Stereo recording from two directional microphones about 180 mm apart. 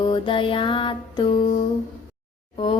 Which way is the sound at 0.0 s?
30° left (ahead or behind).